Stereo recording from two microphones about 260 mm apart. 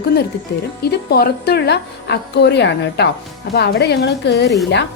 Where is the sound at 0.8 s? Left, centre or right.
Left.